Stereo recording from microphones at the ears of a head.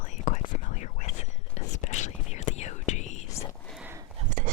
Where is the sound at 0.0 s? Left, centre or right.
Left.